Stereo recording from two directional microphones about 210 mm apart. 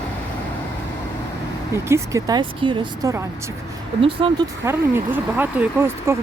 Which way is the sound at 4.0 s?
25° right (ahead or behind).